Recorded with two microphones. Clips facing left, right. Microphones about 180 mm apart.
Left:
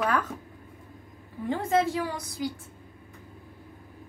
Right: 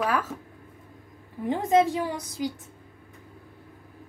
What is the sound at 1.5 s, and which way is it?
A woman's voice, 20° right (ahead or behind).